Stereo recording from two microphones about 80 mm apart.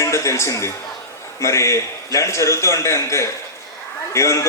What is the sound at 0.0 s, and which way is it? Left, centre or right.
Speech, left.